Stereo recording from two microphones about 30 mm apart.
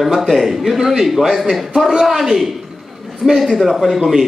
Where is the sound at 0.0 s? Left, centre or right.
Centre.